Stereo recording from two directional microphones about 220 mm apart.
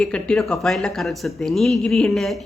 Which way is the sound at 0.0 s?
Centre (ahead or behind).